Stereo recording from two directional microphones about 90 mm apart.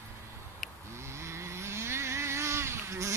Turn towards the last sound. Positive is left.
turn(degrees=-35)  # may be behind; listen again after turning